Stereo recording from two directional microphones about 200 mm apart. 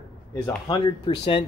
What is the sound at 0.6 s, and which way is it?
Speech, 25° left (ahead or behind).